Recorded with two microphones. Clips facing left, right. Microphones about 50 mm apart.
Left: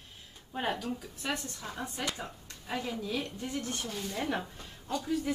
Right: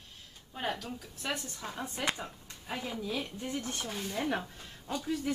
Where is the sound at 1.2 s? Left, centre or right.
Centre.